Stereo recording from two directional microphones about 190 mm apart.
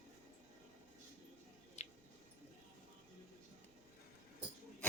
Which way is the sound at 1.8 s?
35° left (ahead or behind).